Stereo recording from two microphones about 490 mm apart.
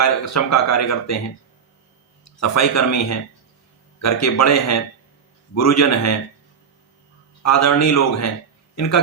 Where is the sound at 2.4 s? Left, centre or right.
Left.